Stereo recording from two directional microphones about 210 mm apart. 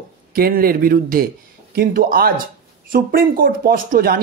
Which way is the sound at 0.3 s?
45° right (ahead or behind).